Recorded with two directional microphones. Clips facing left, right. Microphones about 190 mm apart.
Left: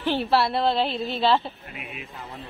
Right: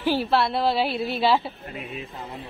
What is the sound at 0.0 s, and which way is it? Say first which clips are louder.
A woman's voice: even; 5° right (ahead or behind).